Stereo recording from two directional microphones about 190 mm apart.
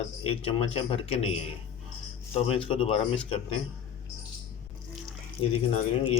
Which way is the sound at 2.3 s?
30° left (ahead or behind).